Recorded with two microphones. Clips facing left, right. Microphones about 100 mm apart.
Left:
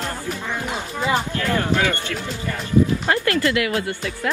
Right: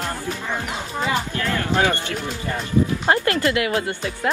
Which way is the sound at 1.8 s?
20° right (ahead or behind).